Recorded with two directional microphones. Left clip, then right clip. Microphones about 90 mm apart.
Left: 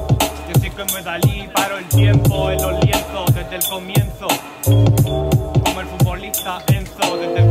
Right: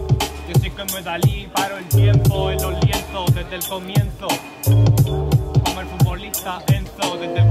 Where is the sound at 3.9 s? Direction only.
20° left (ahead or behind).